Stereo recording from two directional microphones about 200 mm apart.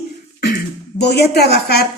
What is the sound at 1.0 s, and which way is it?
Speech, 55° left (ahead or behind).